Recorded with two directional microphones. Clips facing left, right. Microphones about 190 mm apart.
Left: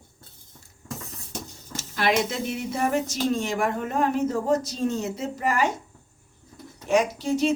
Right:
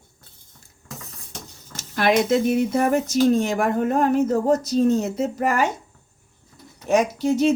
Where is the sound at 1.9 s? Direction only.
50° right (ahead or behind).